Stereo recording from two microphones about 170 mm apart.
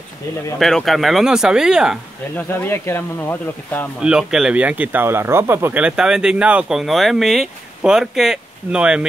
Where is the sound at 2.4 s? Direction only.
10° left (ahead or behind).